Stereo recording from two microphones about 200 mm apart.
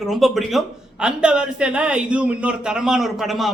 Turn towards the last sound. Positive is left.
turn(degrees=0)  # may be behind; listen again after turning